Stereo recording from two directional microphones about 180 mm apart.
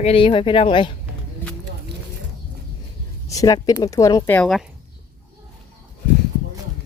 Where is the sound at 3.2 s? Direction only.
20° left (ahead or behind).